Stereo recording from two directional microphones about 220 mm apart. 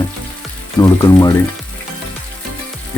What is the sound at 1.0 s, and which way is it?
Speech, 20° left (ahead or behind).